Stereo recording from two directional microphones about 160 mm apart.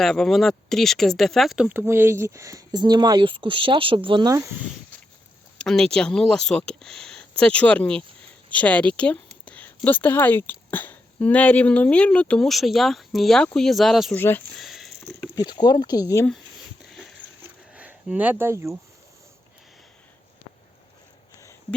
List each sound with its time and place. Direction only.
0.0 s speech: 5° left (ahead or behind); by 4.4 s 25° right (ahead or behind)
5.5 s speech: 5° left (ahead or behind)
14.2 s speech: 15° left (ahead or behind)
14.5 s sniff: centre (ahead or behind)
15.4 s speech: 25° left (ahead or behind)
17.7 s speech: 10° right (ahead or behind)